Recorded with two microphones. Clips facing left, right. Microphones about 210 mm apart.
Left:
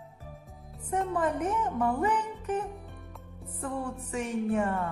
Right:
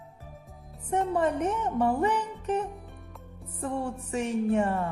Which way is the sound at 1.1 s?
25° right (ahead or behind).